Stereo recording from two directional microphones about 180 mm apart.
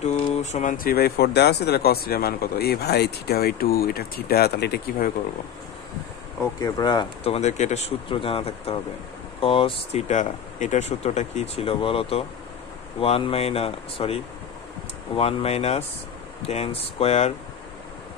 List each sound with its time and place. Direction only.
0.0 s speech: 40° left (ahead or behind); by 5.1 s 65° left (ahead or behind)
6.6 s speech: 25° left (ahead or behind)